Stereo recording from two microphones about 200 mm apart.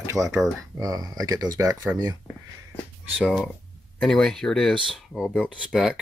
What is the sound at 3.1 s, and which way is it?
Speech, centre (ahead or behind).